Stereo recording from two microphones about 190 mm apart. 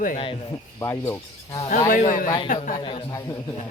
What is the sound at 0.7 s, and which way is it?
Speech, 15° left (ahead or behind).